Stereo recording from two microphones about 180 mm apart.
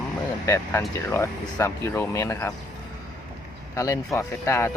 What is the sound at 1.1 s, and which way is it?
Speech, 15° left (ahead or behind).